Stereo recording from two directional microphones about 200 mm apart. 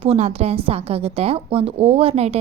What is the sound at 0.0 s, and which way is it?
A woman's voice, 30° right (ahead or behind).